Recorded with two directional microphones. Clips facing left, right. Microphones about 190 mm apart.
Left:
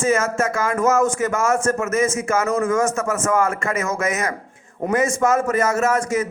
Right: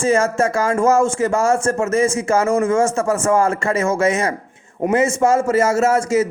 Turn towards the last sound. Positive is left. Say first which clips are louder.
# right 4 dB
turn(degrees=-30)  # may be behind; listen again after turning